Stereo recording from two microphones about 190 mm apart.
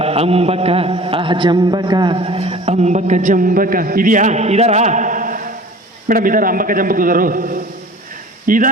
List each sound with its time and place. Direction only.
0.0 s a man's voice: 30° right (ahead or behind)